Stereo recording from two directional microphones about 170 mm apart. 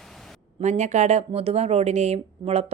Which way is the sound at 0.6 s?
45° right (ahead or behind).